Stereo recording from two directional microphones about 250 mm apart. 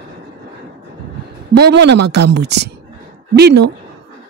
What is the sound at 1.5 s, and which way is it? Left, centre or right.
Speech, right.